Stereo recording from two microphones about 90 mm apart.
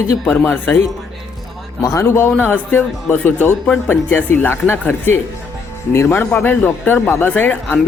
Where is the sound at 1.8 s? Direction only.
35° left (ahead or behind).